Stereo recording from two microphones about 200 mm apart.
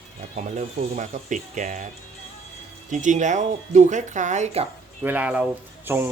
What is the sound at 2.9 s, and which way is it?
Speech, 40° right (ahead or behind).